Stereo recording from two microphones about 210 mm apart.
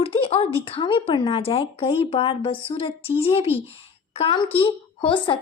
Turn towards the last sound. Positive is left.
turn(degrees=25)  # may be behind; listen again after turning